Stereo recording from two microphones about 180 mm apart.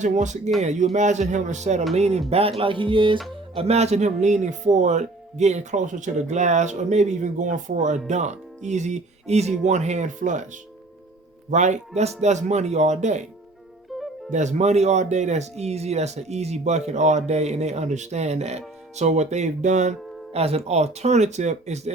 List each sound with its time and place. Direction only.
0.0 s speech: 40° right (ahead or behind)
2.9 s music: 30° right (ahead or behind)
3.5 s speech: 35° right (ahead or behind)
11.5 s speech: 40° right (ahead or behind)
14.3 s speech: 40° right (ahead or behind)